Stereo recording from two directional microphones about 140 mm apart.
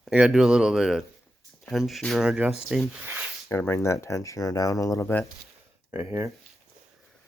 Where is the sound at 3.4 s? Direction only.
15° left (ahead or behind).